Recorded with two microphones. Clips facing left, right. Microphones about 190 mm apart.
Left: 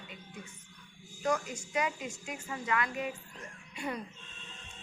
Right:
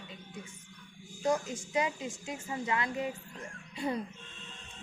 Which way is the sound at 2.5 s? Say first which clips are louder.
Even; 25° right (ahead or behind).